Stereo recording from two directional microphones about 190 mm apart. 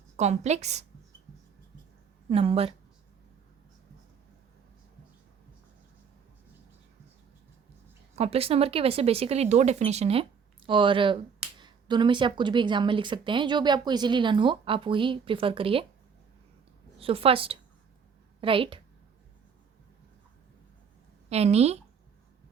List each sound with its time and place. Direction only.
0.2 s speech: 35° right (ahead or behind)
2.3 s speech: 30° right (ahead or behind)
8.1 s speech: 30° right (ahead or behind)
17.0 s a woman's voice: 30° right (ahead or behind)
21.2 s speech: 35° right (ahead or behind)